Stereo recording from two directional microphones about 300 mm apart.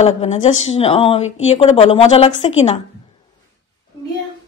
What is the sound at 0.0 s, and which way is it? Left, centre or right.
A woman's voice, left.